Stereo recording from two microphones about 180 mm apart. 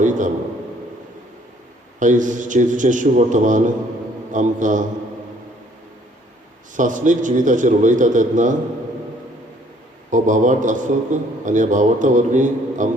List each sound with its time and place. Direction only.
0.0 s a sound: 45° right (ahead or behind)
2.0 s a man's voice: 45° right (ahead or behind)
6.7 s a man's voice: 45° right (ahead or behind)
10.1 s a man's voice: 45° right (ahead or behind)